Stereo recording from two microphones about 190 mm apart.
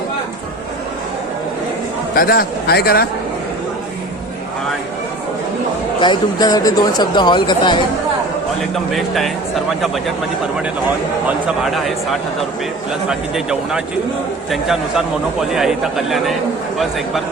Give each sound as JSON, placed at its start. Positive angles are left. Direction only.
{"t": 2.1, "sound": "a man's voice", "side_deg": 50}
{"t": 6.0, "sound": "speech", "side_deg": 20}
{"t": 8.7, "sound": "a man's voice", "side_deg": 0}
{"t": 11.4, "sound": "a man's voice", "side_deg": 0}